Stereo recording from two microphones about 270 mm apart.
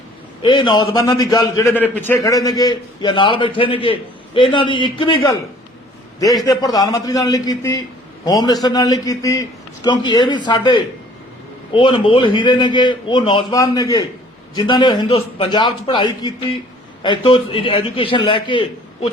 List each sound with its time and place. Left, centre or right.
0.4 s a man's voice: centre